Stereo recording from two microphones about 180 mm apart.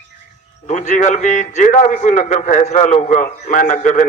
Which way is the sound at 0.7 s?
40° left (ahead or behind).